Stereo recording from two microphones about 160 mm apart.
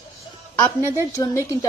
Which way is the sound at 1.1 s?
20° left (ahead or behind).